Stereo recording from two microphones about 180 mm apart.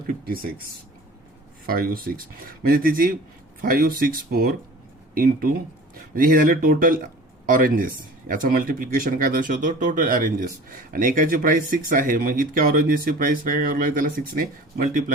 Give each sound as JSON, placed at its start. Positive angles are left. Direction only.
{"t": 0.1, "sound": "speech", "side_deg": -55}
{"t": 1.6, "sound": "speech", "side_deg": -55}